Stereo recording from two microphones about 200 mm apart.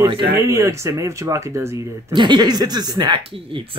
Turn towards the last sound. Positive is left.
turn(degrees=-20)  # may be behind; listen again after turning